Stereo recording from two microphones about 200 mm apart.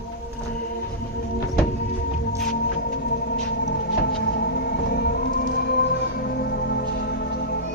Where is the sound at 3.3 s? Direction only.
55° left (ahead or behind).